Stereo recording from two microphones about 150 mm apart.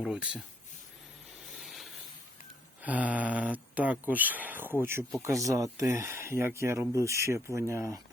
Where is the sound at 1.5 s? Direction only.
Centre (ahead or behind).